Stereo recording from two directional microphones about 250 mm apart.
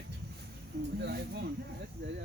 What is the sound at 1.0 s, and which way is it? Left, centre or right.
Speech, right.